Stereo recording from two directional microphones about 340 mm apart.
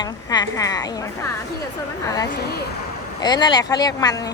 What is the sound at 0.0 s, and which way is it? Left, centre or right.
A woman's voice, centre.